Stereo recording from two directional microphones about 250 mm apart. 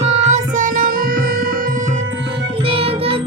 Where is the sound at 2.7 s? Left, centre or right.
Right.